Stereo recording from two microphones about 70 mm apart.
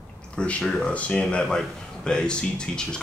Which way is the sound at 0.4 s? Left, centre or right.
Centre.